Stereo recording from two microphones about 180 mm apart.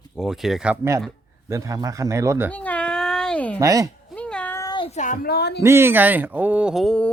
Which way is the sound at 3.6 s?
20° right (ahead or behind).